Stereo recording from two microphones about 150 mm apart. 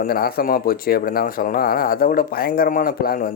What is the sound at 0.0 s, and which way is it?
Speech, 90° left.